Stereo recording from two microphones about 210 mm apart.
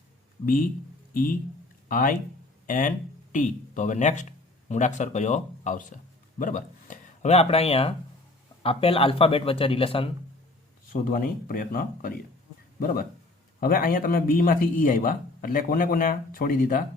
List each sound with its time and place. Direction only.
1.1 s speech: 40° left (ahead or behind); by 10.1 s 25° left (ahead or behind)
11.0 s a man's voice: 40° left (ahead or behind)